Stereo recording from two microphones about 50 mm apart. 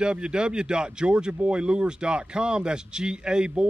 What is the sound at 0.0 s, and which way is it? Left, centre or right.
A man's voice, centre.